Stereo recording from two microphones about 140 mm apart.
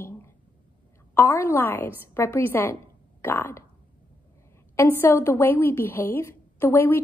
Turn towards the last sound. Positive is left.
turn(degrees=15)  # may be behind; listen again after turning